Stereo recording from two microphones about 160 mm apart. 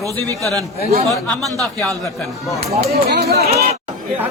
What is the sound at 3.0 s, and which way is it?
Speech, 80° right.